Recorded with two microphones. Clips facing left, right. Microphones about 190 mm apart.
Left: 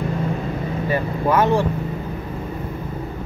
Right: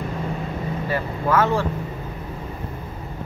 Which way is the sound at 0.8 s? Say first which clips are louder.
Left 4 dB; 15° left (ahead or behind).